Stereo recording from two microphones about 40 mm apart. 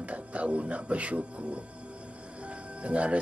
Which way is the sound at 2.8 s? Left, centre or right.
Right.